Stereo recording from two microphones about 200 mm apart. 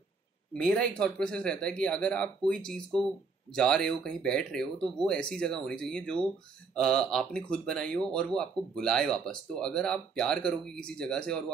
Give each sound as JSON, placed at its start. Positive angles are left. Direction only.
{"t": 0.5, "sound": "speech", "side_deg": 5}